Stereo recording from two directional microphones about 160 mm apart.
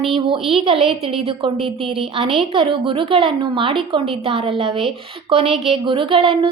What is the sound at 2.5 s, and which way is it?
A woman's voice, 35° right (ahead or behind).